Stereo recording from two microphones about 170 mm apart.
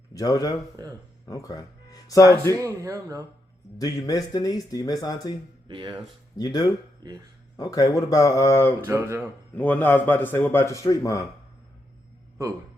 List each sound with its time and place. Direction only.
0.1 s speech: 20° left (ahead or behind)
0.8 s speech: 20° right (ahead or behind)
1.3 s speech: 20° left (ahead or behind)
2.6 s speech: 15° right (ahead or behind)
3.8 s speech: 20° left (ahead or behind)
5.6 s speech: 25° right (ahead or behind)
6.3 s speech: 20° left (ahead or behind)
7.0 s speech: 25° right (ahead or behind)
7.5 s speech: 20° left (ahead or behind)
8.9 s speech: 15° right (ahead or behind)
9.6 s a man's voice: 10° left (ahead or behind)